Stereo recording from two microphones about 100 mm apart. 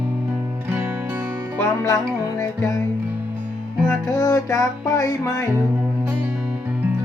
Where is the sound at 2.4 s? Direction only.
35° left (ahead or behind).